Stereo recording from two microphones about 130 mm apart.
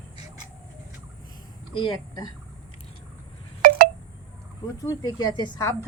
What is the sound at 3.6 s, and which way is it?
Wind chime, 90° right.